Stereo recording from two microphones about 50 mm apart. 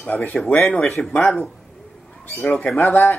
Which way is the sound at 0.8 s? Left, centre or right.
Centre.